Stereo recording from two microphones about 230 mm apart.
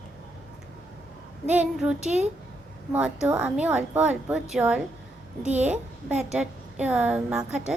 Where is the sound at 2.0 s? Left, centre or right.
Right.